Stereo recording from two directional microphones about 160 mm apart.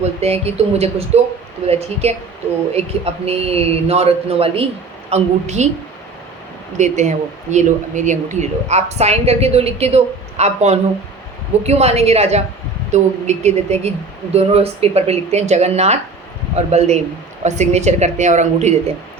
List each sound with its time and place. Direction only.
0.0 s speech: 40° right (ahead or behind)
6.7 s speech: 45° right (ahead or behind)